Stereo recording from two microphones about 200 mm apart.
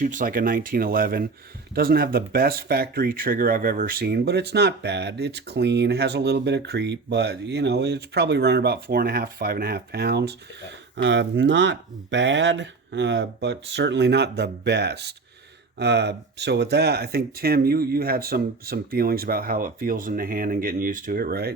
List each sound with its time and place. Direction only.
0.0 s speech: 40° right (ahead or behind)